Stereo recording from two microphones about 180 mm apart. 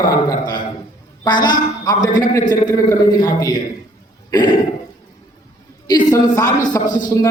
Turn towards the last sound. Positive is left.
turn(degrees=20)  # may be behind; listen again after turning